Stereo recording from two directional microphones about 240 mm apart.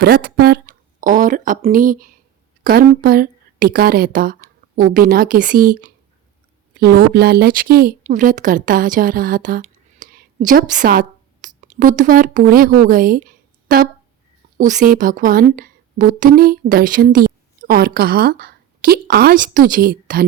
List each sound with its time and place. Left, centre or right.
0.0 s a woman's voice: right